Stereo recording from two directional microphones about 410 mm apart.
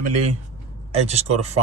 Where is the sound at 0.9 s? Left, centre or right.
Centre.